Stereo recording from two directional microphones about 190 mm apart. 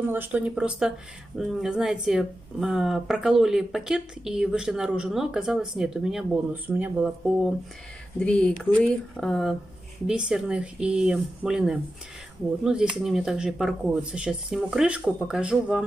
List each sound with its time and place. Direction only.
0.1 s speech: 10° right (ahead or behind)
8.2 s speech: 5° left (ahead or behind)